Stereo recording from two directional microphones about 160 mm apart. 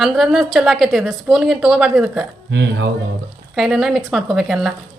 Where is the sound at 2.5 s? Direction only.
90° right.